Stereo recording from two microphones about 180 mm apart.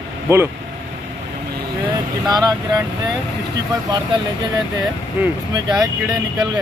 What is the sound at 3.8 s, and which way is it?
Speech, 20° right (ahead or behind).